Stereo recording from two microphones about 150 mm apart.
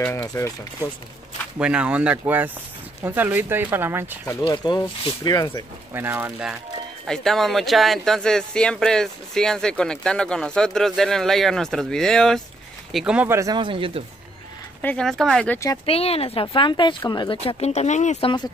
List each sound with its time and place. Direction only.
0.1 s speech: 20° left (ahead or behind)
1.6 s speech: 10° right (ahead or behind)
4.5 s speech: 30° left (ahead or behind)
5.9 s speech: 15° right (ahead or behind)
7.1 s speech: centre (ahead or behind)
13.4 s speech: 30° right (ahead or behind)
14.8 s speech: 10° left (ahead or behind)
15.8 s speech: 40° left (ahead or behind)